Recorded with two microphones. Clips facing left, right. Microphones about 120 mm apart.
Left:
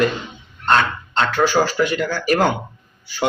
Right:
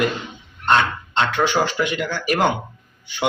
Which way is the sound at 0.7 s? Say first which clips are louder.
Left 1 dB; 20° right (ahead or behind).